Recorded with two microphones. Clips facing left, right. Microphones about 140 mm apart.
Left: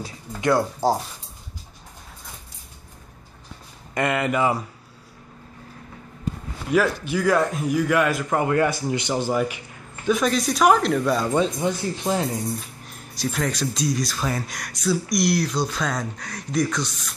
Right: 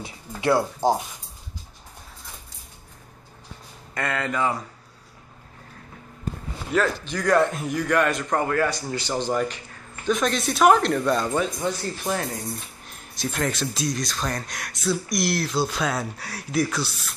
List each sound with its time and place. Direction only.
0.0 s speech: 25° right (ahead or behind)
0.8 s speech: 15° right (ahead or behind)
3.9 s speech: 15° left (ahead or behind)
6.7 s speech: 5° left (ahead or behind)
8.5 s speech: 20° left (ahead or behind); by 11.3 s centre (ahead or behind)
11.3 s speech: 20° left (ahead or behind)
12.5 s speech: centre (ahead or behind)